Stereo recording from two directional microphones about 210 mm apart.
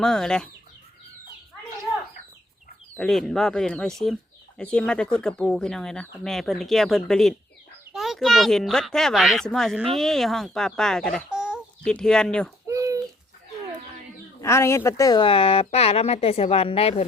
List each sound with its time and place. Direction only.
0.0 s speech: 5° left (ahead or behind)
2.9 s speech: 5° left (ahead or behind)
12.6 s bird: 15° right (ahead or behind)
14.4 s speech: 15° left (ahead or behind)